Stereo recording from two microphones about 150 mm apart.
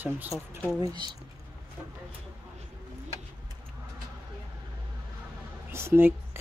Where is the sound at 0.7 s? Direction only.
30° right (ahead or behind).